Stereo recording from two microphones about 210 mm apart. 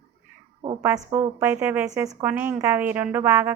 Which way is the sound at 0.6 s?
25° right (ahead or behind).